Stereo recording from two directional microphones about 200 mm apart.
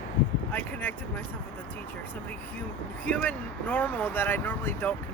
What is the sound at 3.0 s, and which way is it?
Speech, 5° left (ahead or behind).